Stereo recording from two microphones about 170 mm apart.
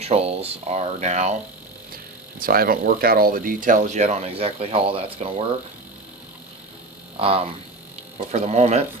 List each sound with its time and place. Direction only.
0.0 s speech: 35° right (ahead or behind)
2.4 s speech: 60° right (ahead or behind); by 5.5 s 35° right (ahead or behind)
7.2 s speech: 35° right (ahead or behind)